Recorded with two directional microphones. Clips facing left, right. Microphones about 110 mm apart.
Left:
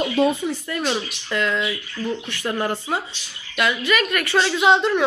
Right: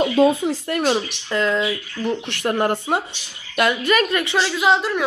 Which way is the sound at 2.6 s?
55° right (ahead or behind).